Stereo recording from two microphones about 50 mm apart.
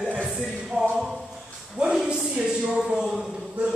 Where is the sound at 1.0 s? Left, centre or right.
Centre.